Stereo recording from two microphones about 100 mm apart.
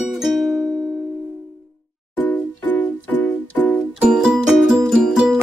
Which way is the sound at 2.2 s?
15° left (ahead or behind).